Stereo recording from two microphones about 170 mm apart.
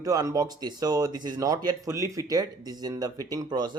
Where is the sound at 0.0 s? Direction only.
20° right (ahead or behind).